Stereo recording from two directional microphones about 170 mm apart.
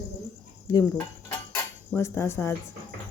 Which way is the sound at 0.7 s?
20° left (ahead or behind).